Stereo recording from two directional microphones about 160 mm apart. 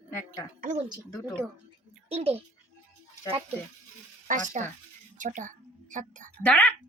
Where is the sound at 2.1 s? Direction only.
40° right (ahead or behind).